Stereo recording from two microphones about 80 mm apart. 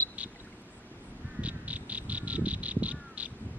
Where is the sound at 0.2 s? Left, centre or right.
Centre.